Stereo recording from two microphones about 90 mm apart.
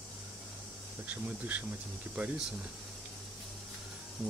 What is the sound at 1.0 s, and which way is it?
Speech, 20° right (ahead or behind).